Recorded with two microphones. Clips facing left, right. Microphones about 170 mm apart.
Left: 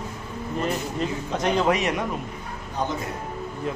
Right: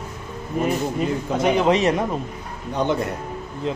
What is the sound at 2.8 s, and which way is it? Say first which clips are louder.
Speech: right 6 dB; 65° right (ahead or behind).